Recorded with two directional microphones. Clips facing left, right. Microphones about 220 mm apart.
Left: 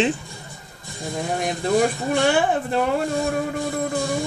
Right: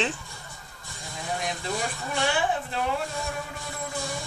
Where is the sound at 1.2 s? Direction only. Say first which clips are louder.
Left 7 dB; 55° left (ahead or behind).